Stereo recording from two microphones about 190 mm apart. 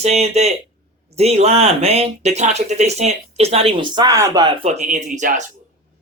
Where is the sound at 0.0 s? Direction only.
35° right (ahead or behind).